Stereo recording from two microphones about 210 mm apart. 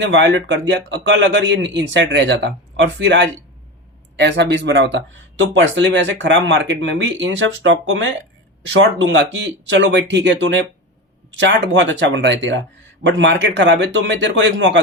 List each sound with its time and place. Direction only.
0.0 s speech: 60° right (ahead or behind)